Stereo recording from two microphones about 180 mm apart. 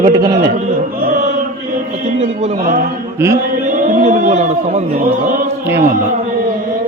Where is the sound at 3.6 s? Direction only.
45° right (ahead or behind).